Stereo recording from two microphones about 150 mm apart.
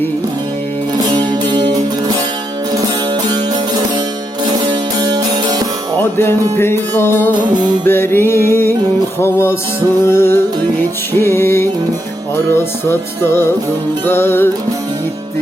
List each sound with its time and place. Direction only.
1.0 s music: 30° right (ahead or behind)
3.2 s music: 25° right (ahead or behind)
6.0 s music: 15° left (ahead or behind)